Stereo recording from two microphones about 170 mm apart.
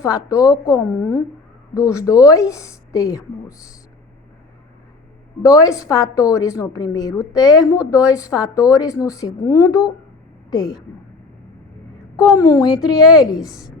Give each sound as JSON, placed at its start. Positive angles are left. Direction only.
{"t": 0.0, "sound": "a woman's voice", "side_deg": 20}
{"t": 5.4, "sound": "a woman's voice", "side_deg": 20}
{"t": 12.4, "sound": "a woman's voice", "side_deg": 20}
{"t": 13.4, "sound": "a woman's voice", "side_deg": 0}